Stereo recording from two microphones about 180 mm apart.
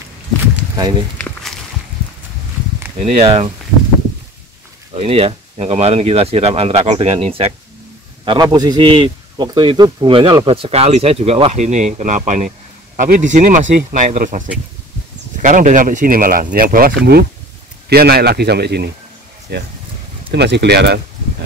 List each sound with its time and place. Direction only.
1.1 s walk: 10° left (ahead or behind)
3.0 s a man's voice: 35° right (ahead or behind)
4.9 s a man's voice: 35° right (ahead or behind); by 21.5 s 70° right (ahead or behind)